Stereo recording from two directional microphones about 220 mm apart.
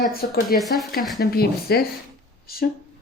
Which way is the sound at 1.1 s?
45° left (ahead or behind).